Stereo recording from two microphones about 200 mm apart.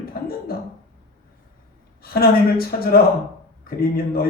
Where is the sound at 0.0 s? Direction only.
50° left (ahead or behind).